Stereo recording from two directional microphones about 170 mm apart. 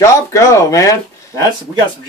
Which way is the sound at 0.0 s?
20° left (ahead or behind).